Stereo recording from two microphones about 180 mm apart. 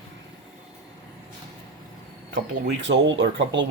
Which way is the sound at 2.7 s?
80° right.